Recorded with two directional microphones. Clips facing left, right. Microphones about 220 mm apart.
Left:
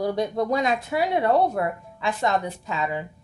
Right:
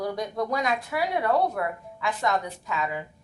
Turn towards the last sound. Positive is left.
turn(degrees=25)  # may be behind; listen again after turning